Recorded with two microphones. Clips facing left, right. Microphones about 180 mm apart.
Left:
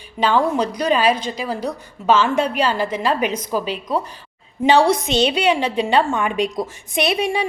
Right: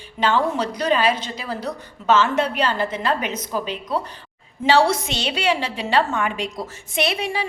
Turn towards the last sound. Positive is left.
turn(degrees=20)  # may be behind; listen again after turning